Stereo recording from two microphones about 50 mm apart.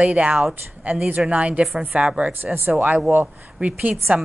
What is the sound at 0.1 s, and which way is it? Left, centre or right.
A woman's voice, right.